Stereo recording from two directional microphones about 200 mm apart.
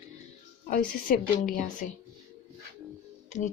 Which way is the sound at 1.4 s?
40° left (ahead or behind).